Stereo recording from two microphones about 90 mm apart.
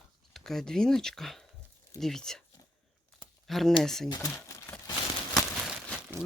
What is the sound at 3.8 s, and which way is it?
Speech, 5° left (ahead or behind).